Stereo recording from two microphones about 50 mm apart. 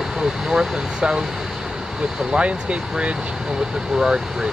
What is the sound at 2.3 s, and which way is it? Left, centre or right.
Speech, right.